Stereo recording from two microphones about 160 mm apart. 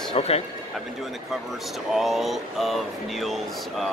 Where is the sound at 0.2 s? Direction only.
40° left (ahead or behind).